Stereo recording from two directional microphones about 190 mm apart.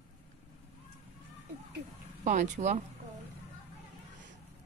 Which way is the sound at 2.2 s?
40° right (ahead or behind).